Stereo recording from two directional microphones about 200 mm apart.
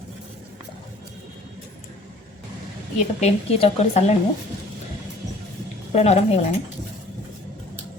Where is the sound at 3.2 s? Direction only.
35° left (ahead or behind).